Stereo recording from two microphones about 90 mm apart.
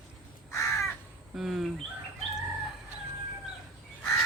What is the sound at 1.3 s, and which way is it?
Speech, 5° right (ahead or behind).